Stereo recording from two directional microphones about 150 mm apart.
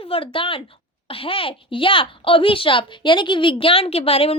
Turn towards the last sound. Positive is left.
turn(degrees=40)  # may be behind; listen again after turning